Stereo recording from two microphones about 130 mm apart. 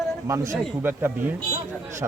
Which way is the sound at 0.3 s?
25° right (ahead or behind).